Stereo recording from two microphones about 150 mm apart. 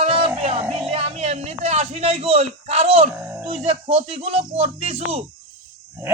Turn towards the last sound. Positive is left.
turn(degrees=-45)  # may be behind; listen again after turning